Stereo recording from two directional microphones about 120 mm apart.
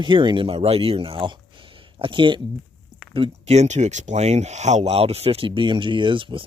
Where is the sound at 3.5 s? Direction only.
70° right (ahead or behind); by 6.4 s 45° right (ahead or behind).